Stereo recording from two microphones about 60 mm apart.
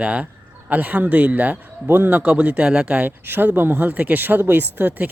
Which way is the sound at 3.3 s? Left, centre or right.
Right.